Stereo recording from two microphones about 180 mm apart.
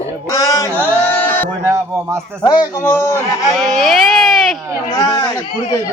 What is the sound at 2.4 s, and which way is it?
Speech, 20° left (ahead or behind).